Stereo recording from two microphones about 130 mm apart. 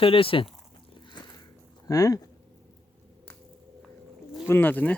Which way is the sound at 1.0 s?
35° left (ahead or behind).